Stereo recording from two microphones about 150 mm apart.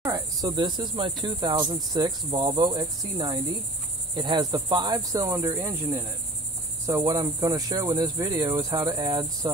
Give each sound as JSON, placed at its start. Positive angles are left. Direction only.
{"t": 0.0, "sound": "cricket", "side_deg": -25}